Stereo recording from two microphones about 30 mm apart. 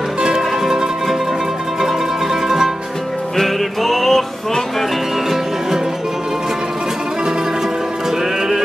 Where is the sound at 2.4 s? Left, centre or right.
Centre.